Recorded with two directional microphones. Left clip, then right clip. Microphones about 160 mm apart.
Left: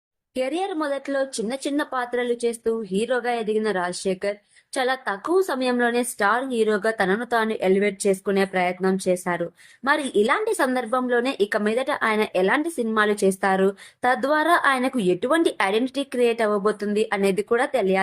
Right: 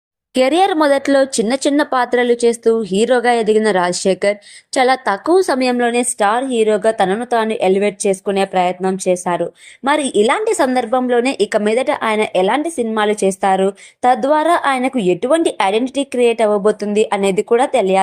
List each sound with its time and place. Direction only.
0.3 s speech: 55° right (ahead or behind); by 5.7 s 40° right (ahead or behind)
5.7 s a woman's voice: 25° right (ahead or behind)